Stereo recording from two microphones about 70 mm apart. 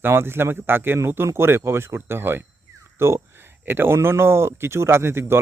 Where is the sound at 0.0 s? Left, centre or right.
Right.